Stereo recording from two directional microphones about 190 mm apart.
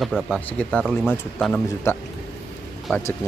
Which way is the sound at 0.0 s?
5° left (ahead or behind).